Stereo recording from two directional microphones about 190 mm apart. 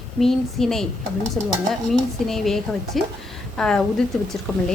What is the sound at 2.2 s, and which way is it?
Speech, centre (ahead or behind).